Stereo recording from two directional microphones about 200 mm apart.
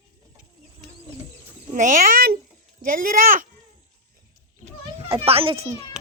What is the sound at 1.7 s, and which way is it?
Speech, 40° right (ahead or behind).